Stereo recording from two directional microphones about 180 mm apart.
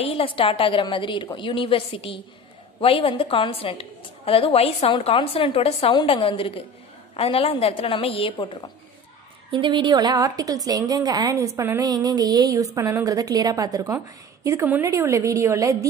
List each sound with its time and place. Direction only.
0.0 s a woman's voice: 30° left (ahead or behind)
9.5 s a woman's voice: 25° right (ahead or behind)